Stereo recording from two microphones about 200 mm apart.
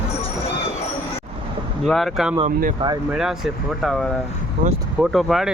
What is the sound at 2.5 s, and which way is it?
Speech, 45° right (ahead or behind).